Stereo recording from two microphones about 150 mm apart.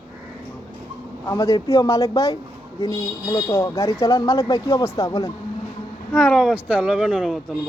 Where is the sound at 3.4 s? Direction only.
20° left (ahead or behind).